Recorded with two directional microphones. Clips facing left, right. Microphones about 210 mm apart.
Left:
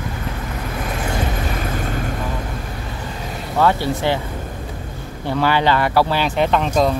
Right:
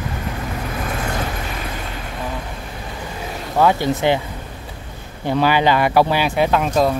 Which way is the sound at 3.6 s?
15° right (ahead or behind).